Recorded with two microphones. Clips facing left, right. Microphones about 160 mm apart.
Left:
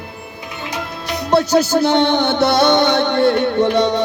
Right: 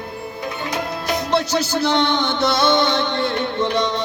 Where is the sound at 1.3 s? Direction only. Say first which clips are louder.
Left 8 dB; 45° left (ahead or behind).